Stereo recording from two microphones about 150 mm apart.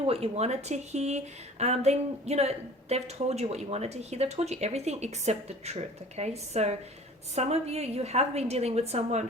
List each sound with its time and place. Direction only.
0.0 s speech: 40° right (ahead or behind)